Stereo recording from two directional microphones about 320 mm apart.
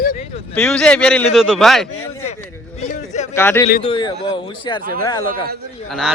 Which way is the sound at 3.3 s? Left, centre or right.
Centre.